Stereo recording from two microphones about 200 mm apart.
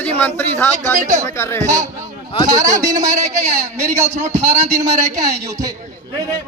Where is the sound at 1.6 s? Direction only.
15° right (ahead or behind).